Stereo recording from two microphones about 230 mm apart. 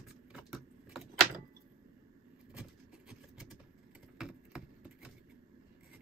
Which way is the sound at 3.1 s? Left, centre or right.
Centre.